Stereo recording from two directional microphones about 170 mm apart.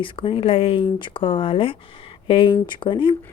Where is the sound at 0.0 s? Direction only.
30° left (ahead or behind).